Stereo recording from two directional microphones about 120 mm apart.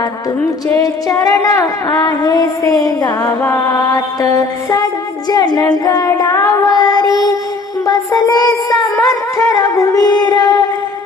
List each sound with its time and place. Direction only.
0.8 s music: 30° left (ahead or behind)